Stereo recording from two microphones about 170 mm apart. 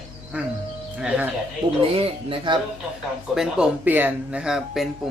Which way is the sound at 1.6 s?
30° right (ahead or behind).